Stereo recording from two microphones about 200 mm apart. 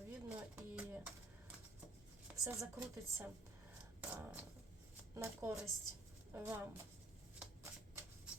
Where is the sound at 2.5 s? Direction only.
15° right (ahead or behind).